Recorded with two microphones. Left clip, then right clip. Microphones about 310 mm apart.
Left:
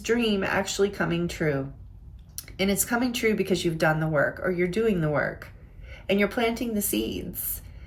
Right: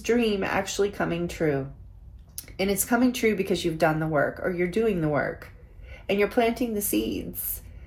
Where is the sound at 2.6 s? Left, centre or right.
Centre.